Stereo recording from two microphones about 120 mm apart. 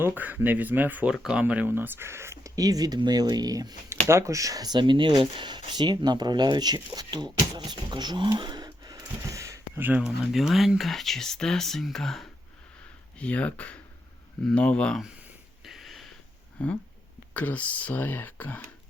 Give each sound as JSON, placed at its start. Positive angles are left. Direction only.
{"t": 0.0, "sound": "speech", "side_deg": -15}
{"t": 10.3, "sound": "speech", "side_deg": 0}
{"t": 15.6, "sound": "a sound", "side_deg": 0}
{"t": 16.6, "sound": "speech", "side_deg": 10}